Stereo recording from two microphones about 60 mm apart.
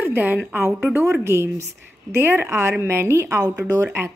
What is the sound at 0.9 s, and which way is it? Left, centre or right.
A woman's voice, right.